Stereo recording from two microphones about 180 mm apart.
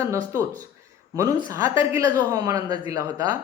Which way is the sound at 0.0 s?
15° right (ahead or behind).